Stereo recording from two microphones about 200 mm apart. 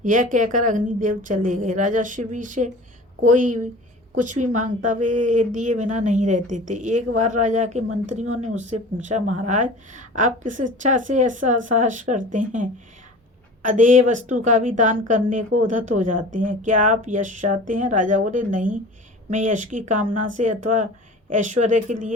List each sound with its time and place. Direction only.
0.0 s a woman's voice: 40° right (ahead or behind)